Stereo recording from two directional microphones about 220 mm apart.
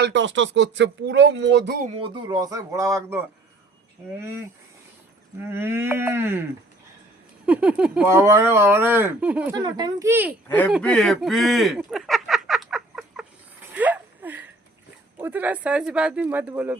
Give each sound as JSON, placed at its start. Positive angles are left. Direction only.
{"t": 0.0, "sound": "speech", "side_deg": -55}
{"t": 2.0, "sound": "speech", "side_deg": -20}
{"t": 4.2, "sound": "speech", "side_deg": -10}
{"t": 7.4, "sound": "speech", "side_deg": -5}
{"t": 9.6, "sound": "speech", "side_deg": -20}
{"t": 10.5, "sound": "speech", "side_deg": 5}
{"t": 10.8, "sound": "a sound", "side_deg": 0}
{"t": 13.7, "sound": "wheeze", "side_deg": -5}
{"t": 15.2, "sound": "speech", "side_deg": -10}